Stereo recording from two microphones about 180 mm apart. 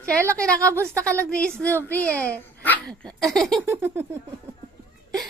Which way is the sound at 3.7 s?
10° right (ahead or behind).